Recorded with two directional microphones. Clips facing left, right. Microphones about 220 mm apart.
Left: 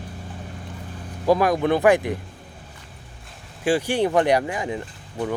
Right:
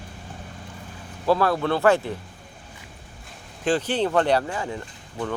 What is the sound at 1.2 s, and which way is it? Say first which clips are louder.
Speech: left 2 dB; 15° left (ahead or behind).